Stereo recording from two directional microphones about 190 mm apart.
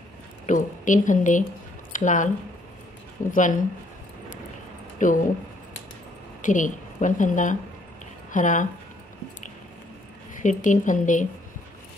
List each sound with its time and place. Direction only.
0.5 s a woman's voice: 40° left (ahead or behind)
4.9 s speech: 45° left (ahead or behind)
6.4 s a woman's voice: 40° left (ahead or behind)
10.4 s a woman's voice: 40° left (ahead or behind)